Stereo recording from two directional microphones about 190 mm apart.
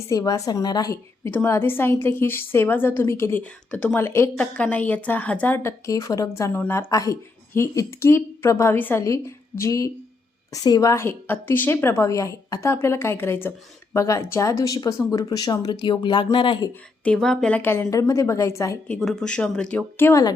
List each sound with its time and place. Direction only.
0.1 s a woman's voice: 15° left (ahead or behind)
17.0 s a woman's voice: 5° left (ahead or behind)
18.9 s speech: 5° left (ahead or behind)